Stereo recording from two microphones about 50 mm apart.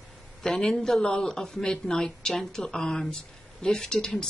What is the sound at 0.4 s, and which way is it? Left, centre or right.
Speech, centre.